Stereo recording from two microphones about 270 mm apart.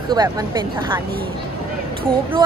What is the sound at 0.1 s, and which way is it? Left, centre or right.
Speech, centre.